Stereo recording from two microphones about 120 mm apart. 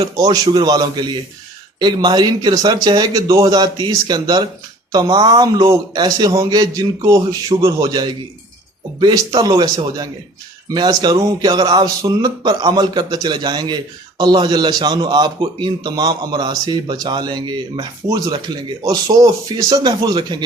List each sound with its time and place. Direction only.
0.2 s a man's voice: 35° right (ahead or behind)